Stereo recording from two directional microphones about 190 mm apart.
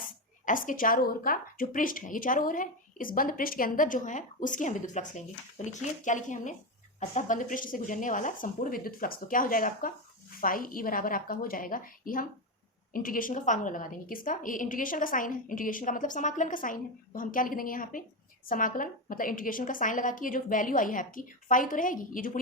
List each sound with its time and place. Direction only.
0.4 s a woman's voice: 45° left (ahead or behind)